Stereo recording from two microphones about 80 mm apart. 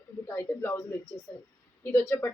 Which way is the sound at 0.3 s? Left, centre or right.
Left.